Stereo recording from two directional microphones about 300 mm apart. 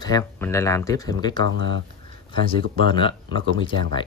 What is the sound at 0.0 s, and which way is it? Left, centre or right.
Speech, centre.